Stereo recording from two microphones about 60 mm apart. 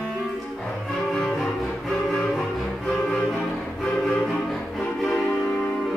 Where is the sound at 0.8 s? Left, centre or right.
Centre.